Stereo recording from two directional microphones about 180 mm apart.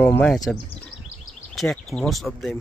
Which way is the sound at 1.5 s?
Centre (ahead or behind).